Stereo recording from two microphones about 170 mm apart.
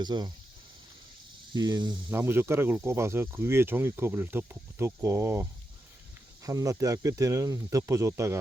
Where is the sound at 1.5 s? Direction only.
25° right (ahead or behind).